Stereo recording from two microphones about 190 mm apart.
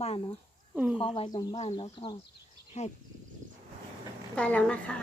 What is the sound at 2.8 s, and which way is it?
Speech, 35° left (ahead or behind).